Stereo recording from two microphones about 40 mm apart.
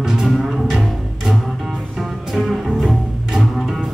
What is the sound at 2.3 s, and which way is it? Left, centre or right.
Music, centre.